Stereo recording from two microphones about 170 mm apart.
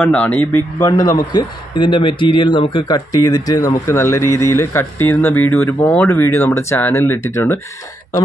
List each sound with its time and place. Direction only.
0.0 s a man's voice: 10° left (ahead or behind)
0.7 s a man's voice: 20° left (ahead or behind)